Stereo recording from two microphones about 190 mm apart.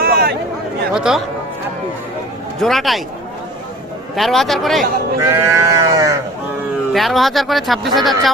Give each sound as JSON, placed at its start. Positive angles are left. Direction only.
{"t": 0.0, "sound": "a sound", "side_deg": -55}
{"t": 0.9, "sound": "speech", "side_deg": -5}
{"t": 2.6, "sound": "speech", "side_deg": 0}
{"t": 4.1, "sound": "speech", "side_deg": 0}
{"t": 5.2, "sound": "sheep", "side_deg": -15}
{"t": 6.9, "sound": "speech", "side_deg": 0}